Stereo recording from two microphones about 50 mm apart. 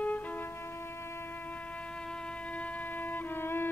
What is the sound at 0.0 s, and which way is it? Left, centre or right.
Music, left.